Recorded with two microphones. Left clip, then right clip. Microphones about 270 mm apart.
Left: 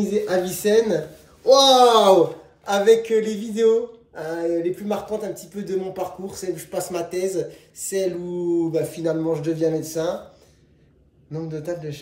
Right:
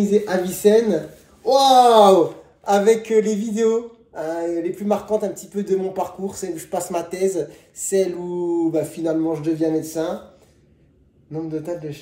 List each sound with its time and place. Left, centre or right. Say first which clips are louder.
0.3 s a woman's voice: right 2 dB; centre
1.5 s speech: left 1 dB; centre
1.8 s a woman's voice: right 2 dB; centre
11.3 s a woman's voice: right 2 dB; centre